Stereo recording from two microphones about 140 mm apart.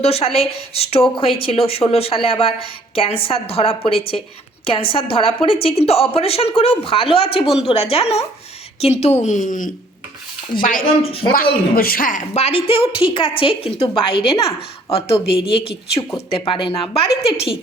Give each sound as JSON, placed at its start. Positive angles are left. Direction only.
{"t": 0.0, "sound": "a woman's voice", "side_deg": 45}
{"t": 7.3, "sound": "a woman's voice", "side_deg": 0}
{"t": 7.7, "sound": "a woman's voice", "side_deg": 45}
{"t": 11.7, "sound": "speech", "side_deg": 90}
{"t": 12.3, "sound": "a woman's voice", "side_deg": 50}